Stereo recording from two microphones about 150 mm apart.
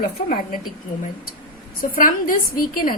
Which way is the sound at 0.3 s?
70° left (ahead or behind).